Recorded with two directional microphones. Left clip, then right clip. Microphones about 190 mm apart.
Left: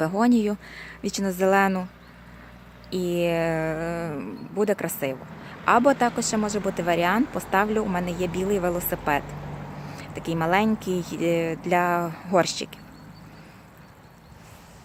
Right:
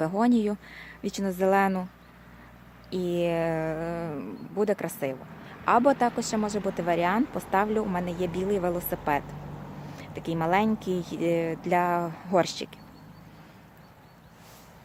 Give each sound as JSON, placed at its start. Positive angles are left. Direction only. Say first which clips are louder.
{"t": 0.0, "sound": "speech", "louder": "left 3 dB", "side_deg": 0}
{"t": 2.9, "sound": "speech", "louder": "left 3 dB", "side_deg": 0}